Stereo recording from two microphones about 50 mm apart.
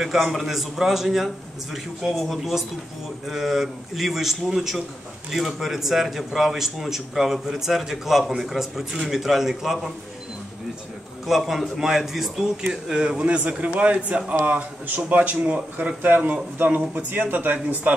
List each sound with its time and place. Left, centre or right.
0.0 s a man's voice: centre
11.2 s a man's voice: centre
12.8 s a man's voice: centre
16.1 s speech: right